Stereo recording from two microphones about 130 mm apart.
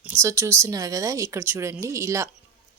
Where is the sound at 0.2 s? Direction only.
20° right (ahead or behind).